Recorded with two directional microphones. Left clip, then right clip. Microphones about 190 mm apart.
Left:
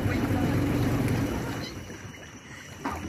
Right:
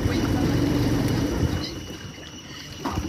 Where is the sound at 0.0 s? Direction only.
70° left (ahead or behind).